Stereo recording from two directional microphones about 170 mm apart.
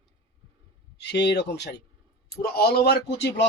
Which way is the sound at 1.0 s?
80° left.